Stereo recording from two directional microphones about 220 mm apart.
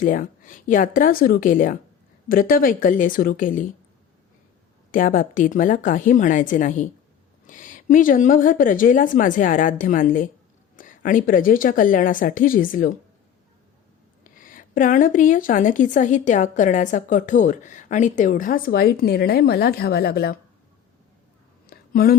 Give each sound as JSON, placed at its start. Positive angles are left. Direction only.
{"t": 0.0, "sound": "speech", "side_deg": 35}
{"t": 4.9, "sound": "speech", "side_deg": 40}
{"t": 14.3, "sound": "speech", "side_deg": 40}
{"t": 21.7, "sound": "a sound", "side_deg": 40}